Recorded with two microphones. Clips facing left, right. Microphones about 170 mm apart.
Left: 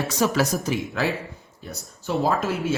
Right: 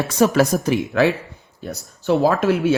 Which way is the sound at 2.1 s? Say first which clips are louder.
Right 7 dB; 70° right (ahead or behind).